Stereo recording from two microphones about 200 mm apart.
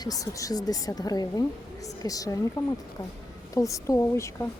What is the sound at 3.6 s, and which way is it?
Speech, 15° left (ahead or behind).